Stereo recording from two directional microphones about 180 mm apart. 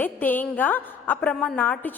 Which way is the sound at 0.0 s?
10° left (ahead or behind).